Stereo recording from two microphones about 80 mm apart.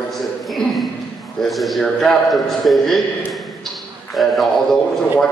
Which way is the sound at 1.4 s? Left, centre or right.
Centre.